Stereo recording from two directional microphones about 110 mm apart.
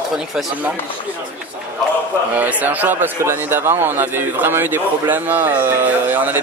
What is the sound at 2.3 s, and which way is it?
A man's voice, 15° right (ahead or behind).